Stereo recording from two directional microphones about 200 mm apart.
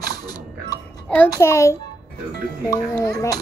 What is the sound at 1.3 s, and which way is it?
A child's voice, 15° left (ahead or behind).